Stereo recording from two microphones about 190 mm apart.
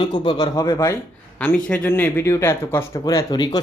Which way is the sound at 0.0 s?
25° left (ahead or behind).